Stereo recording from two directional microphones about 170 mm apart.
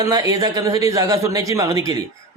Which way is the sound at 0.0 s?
20° right (ahead or behind).